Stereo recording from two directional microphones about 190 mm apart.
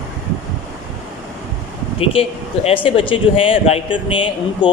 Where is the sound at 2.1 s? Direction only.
30° left (ahead or behind).